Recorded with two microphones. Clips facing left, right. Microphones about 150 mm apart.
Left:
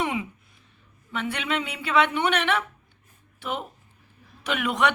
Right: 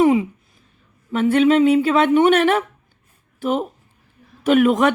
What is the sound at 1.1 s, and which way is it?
Speech, 45° right (ahead or behind).